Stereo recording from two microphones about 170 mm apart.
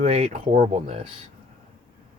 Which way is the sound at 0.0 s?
40° right (ahead or behind).